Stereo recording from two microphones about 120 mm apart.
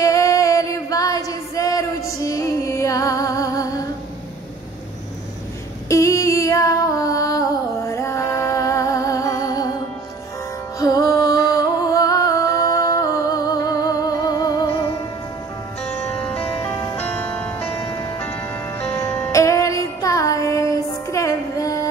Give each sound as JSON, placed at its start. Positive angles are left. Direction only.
{"t": 0.0, "sound": "female singing", "side_deg": 30}
{"t": 5.9, "sound": "female singing", "side_deg": 25}
{"t": 10.8, "sound": "music", "side_deg": 30}
{"t": 15.8, "sound": "music", "side_deg": 10}